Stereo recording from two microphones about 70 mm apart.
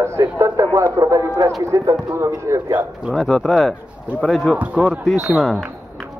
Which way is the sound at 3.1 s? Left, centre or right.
Centre.